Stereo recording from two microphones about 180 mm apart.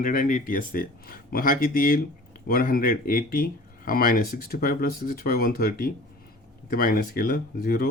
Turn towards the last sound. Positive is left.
turn(degrees=55)  # may be behind; listen again after turning